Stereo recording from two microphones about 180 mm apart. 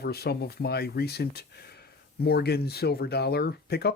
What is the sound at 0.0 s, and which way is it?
Speech, 60° left (ahead or behind).